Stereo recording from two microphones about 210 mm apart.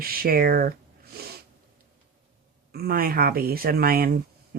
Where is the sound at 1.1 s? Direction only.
45° right (ahead or behind).